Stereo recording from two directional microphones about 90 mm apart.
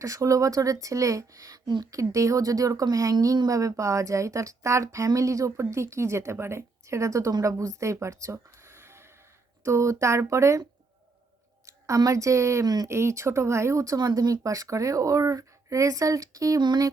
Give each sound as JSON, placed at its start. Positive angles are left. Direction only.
{"t": 0.0, "sound": "a woman's voice", "side_deg": -35}
{"t": 1.6, "sound": "a woman's voice", "side_deg": -55}
{"t": 1.9, "sound": "a woman's voice", "side_deg": -35}
{"t": 11.6, "sound": "a woman's voice", "side_deg": -40}
{"t": 12.9, "sound": "a woman's voice", "side_deg": -30}
{"t": 16.6, "sound": "a sound", "side_deg": -55}